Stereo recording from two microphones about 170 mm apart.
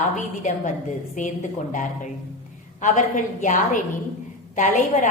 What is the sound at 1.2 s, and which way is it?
Speech, 50° left (ahead or behind).